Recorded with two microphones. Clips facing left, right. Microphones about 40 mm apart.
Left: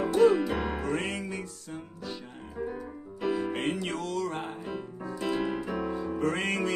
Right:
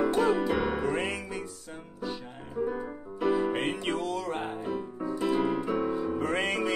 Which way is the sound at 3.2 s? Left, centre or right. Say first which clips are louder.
Right 3 dB; centre.